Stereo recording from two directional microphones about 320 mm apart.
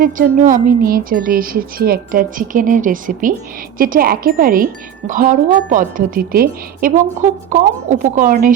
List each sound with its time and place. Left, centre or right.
0.0 s speech: right